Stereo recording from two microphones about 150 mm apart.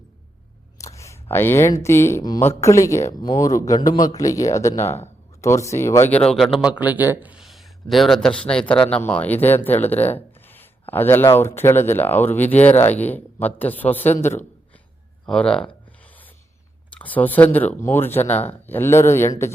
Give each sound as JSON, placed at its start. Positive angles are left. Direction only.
{"t": 0.9, "sound": "speech", "side_deg": 20}
{"t": 15.3, "sound": "a sound", "side_deg": 5}
{"t": 16.9, "sound": "speech", "side_deg": 10}